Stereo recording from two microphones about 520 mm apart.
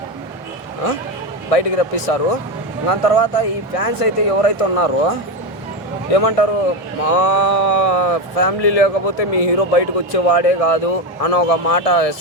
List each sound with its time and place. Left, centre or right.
1.5 s speech: left
6.1 s speech: left